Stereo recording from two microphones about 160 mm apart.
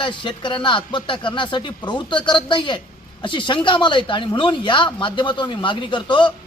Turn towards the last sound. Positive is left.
turn(degrees=30)  # may be behind; listen again after turning